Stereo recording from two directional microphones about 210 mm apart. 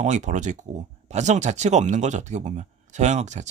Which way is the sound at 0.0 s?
35° right (ahead or behind).